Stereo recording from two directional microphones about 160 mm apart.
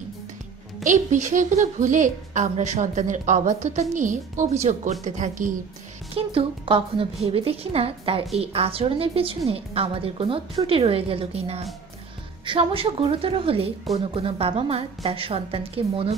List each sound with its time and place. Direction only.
0.8 s a woman's voice: 50° right (ahead or behind)
6.1 s a woman's voice: 35° right (ahead or behind)